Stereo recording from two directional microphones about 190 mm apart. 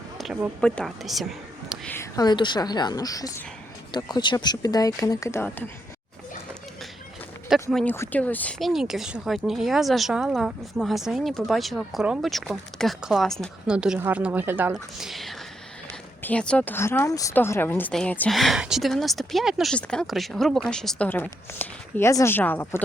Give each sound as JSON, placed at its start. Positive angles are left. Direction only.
{"t": 0.2, "sound": "a sound", "side_deg": 0}
{"t": 0.6, "sound": "a woman's voice", "side_deg": 5}
{"t": 1.9, "sound": "speech", "side_deg": 15}
{"t": 7.5, "sound": "speech", "side_deg": 0}